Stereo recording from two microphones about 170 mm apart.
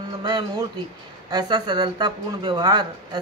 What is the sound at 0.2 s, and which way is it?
Speech, 25° right (ahead or behind).